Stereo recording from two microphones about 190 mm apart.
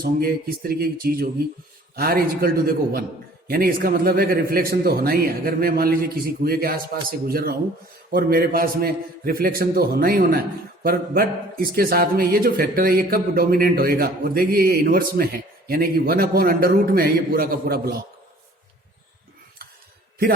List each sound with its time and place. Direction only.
0.0 s a man's voice: 50° right (ahead or behind)